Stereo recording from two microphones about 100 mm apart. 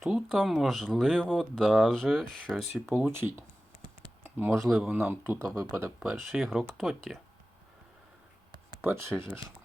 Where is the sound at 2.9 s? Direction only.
20° right (ahead or behind).